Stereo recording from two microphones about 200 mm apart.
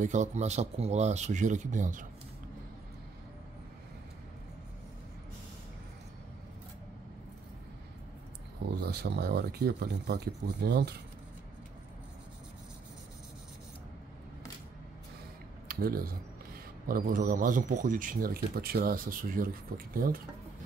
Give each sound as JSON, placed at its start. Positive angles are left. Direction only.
{"t": 0.0, "sound": "speech", "side_deg": -35}
{"t": 8.6, "sound": "speech", "side_deg": -55}
{"t": 15.7, "sound": "speech", "side_deg": -50}